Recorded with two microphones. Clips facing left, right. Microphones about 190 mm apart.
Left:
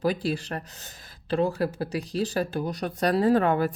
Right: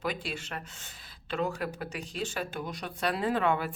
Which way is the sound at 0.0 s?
35° left (ahead or behind).